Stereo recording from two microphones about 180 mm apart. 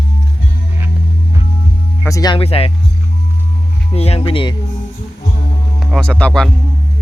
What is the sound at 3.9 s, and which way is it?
Speech, 35° left (ahead or behind).